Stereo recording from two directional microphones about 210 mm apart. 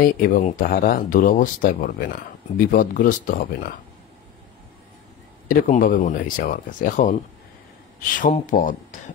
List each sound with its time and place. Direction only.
0.0 s speech: 40° left (ahead or behind)
5.5 s speech: 40° left (ahead or behind)
8.2 s speech: 40° left (ahead or behind)